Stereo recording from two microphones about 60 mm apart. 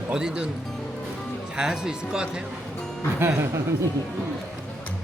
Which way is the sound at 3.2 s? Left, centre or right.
Right.